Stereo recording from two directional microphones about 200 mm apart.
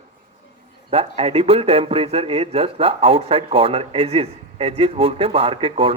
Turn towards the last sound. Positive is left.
turn(degrees=-25)  # may be behind; listen again after turning